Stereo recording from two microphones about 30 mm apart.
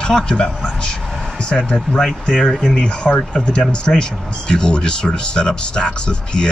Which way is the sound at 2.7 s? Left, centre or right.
Left.